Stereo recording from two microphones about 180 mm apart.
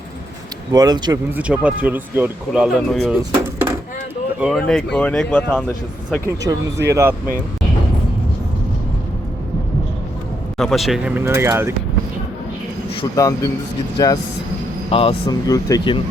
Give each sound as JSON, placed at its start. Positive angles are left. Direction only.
{"t": 0.7, "sound": "speech", "side_deg": -20}
{"t": 1.4, "sound": "speech", "side_deg": -5}
{"t": 4.4, "sound": "speech", "side_deg": 0}
{"t": 6.2, "sound": "speech", "side_deg": -20}
{"t": 10.6, "sound": "speech", "side_deg": 0}
{"t": 13.1, "sound": "a man's voice", "side_deg": 20}